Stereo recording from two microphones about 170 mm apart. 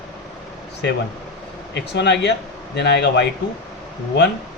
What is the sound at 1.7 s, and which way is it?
Speech, 90° left.